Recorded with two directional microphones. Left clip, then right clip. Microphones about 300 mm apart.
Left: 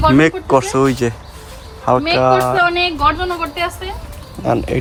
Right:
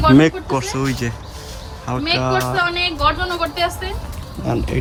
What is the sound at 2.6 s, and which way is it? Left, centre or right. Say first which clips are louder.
Speech: left 4 dB; centre.